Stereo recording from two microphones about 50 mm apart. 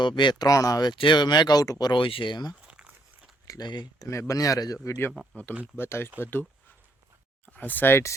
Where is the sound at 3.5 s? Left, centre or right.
Left.